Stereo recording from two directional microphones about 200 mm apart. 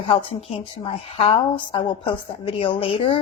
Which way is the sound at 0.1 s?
25° left (ahead or behind).